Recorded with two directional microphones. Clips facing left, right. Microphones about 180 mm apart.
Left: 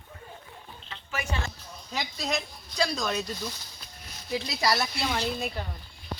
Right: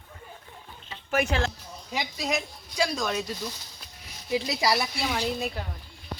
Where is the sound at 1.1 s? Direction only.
90° right.